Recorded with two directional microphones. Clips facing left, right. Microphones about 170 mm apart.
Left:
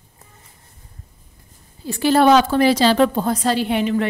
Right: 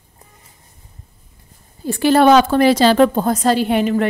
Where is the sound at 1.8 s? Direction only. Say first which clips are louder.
Right 3 dB; 55° right (ahead or behind).